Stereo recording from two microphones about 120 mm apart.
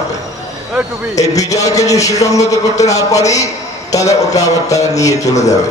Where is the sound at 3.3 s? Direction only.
30° left (ahead or behind).